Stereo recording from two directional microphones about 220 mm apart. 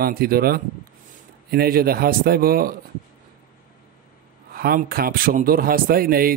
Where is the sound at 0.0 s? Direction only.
40° right (ahead or behind).